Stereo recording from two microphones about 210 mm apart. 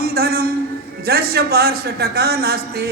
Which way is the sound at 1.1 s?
45° right (ahead or behind).